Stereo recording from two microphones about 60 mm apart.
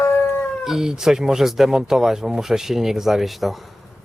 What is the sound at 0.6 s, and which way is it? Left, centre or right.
Speech, centre.